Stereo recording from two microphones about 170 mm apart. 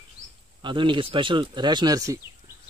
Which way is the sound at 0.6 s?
30° right (ahead or behind).